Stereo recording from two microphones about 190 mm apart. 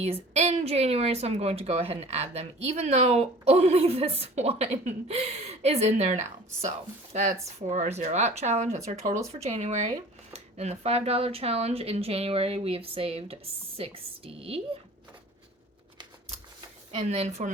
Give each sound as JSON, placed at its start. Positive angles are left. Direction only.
{"t": 0.0, "sound": "a woman's voice", "side_deg": -35}
{"t": 16.9, "sound": "a woman's voice", "side_deg": -35}